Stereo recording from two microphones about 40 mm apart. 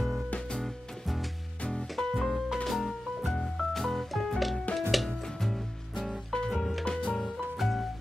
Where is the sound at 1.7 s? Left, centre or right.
Centre.